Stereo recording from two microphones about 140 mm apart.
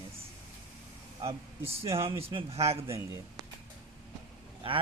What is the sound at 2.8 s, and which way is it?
Speech, 20° right (ahead or behind).